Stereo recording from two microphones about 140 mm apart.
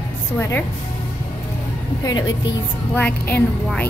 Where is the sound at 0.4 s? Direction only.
15° left (ahead or behind).